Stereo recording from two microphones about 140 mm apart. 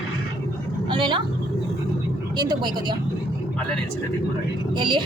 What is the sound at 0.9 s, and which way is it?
Speech, 35° right (ahead or behind).